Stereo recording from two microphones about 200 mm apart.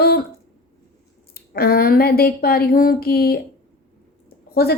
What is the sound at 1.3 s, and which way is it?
A woman's voice, 45° left (ahead or behind).